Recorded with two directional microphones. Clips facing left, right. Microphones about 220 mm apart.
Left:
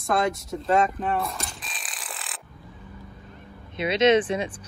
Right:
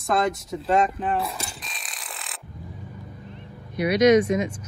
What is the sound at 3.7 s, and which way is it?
Speech, 25° left (ahead or behind).